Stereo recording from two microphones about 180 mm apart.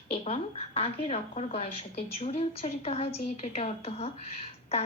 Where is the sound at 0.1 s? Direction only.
35° left (ahead or behind).